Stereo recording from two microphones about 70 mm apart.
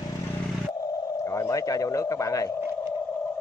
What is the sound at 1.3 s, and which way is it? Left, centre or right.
Speech, left.